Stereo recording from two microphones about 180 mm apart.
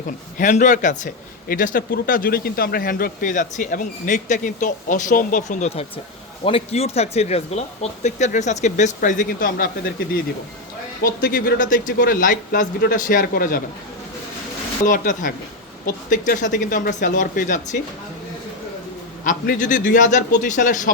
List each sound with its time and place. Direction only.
0.3 s a man's voice: 45° left (ahead or behind)
11.0 s a man's voice: 50° left (ahead or behind)
14.8 s a man's voice: 45° left (ahead or behind)
19.2 s a man's voice: 45° left (ahead or behind)